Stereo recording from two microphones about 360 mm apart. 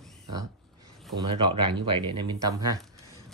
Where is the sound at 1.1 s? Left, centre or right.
Centre.